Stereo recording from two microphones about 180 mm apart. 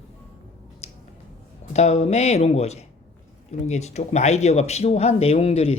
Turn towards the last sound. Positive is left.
turn(degrees=35)  # may be behind; listen again after turning